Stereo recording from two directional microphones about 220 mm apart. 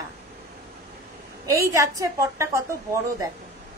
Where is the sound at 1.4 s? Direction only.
15° right (ahead or behind).